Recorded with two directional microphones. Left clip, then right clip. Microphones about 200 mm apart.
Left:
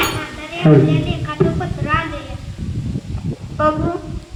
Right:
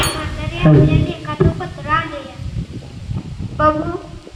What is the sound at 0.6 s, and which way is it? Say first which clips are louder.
Speech: left 1 dB; 30° right (ahead or behind).